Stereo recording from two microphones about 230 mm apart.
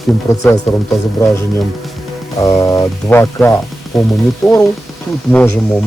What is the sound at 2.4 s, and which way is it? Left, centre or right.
Speech, centre.